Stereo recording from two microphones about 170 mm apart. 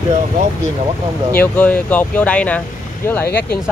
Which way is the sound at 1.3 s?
10° left (ahead or behind).